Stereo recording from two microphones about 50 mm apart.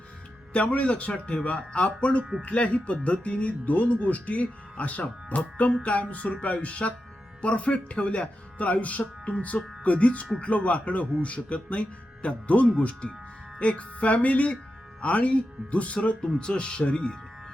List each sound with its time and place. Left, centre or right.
0.5 s speech: left